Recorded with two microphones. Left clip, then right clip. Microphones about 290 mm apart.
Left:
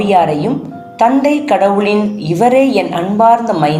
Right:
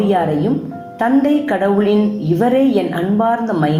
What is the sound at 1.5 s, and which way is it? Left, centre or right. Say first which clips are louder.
A woman's voice: left 6 dB; left.